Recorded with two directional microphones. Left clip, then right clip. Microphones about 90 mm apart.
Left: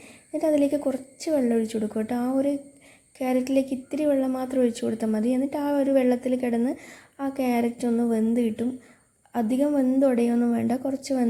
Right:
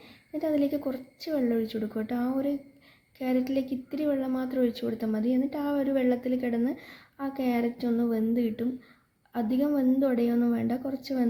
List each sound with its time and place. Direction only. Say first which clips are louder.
0.3 s a woman's voice: left 5 dB; 40° left (ahead or behind)